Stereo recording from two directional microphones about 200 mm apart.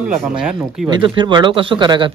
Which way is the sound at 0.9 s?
25° right (ahead or behind).